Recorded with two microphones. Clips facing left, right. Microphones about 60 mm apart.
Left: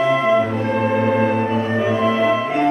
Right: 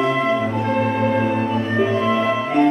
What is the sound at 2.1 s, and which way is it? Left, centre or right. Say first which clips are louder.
Music: left 2 dB; centre.